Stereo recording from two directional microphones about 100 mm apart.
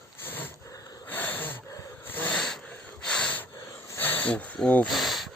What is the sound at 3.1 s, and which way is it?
Snort, 10° left (ahead or behind).